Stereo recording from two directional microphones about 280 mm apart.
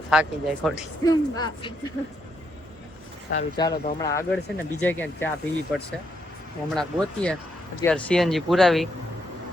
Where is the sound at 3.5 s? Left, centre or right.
Centre.